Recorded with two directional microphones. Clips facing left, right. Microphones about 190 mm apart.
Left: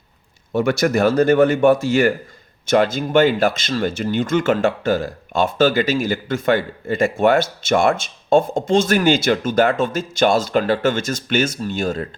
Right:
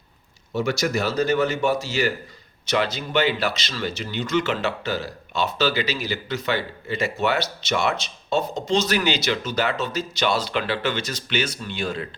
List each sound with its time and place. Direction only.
0.5 s speech: 55° left (ahead or behind)